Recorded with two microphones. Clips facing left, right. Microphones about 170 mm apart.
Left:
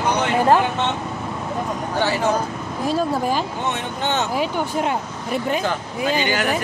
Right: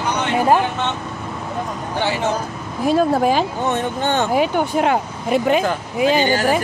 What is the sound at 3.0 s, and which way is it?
Speech, 75° right (ahead or behind).